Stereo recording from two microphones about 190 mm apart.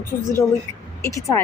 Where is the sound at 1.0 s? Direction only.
15° left (ahead or behind).